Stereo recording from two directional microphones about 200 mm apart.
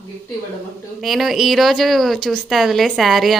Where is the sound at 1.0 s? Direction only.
Centre (ahead or behind).